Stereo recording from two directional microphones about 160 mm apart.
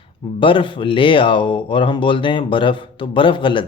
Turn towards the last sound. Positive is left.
turn(degrees=30)  # may be behind; listen again after turning